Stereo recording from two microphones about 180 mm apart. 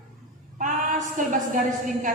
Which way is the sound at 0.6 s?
45° right (ahead or behind).